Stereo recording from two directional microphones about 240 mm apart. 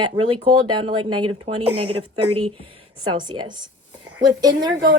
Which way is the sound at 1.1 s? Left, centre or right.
Right.